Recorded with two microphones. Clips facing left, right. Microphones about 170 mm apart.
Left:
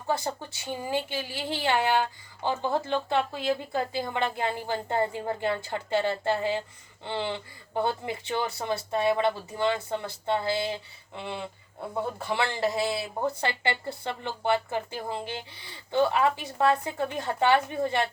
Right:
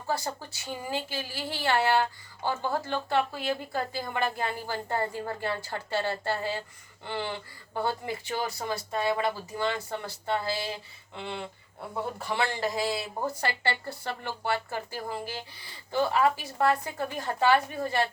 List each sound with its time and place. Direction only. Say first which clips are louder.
0.1 s speech: left 2 dB; 20° left (ahead or behind)